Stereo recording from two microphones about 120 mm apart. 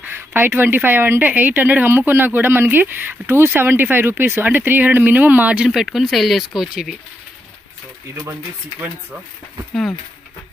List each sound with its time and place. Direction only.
0.0 s a woman's voice: 20° right (ahead or behind)
5.7 s speech: centre (ahead or behind)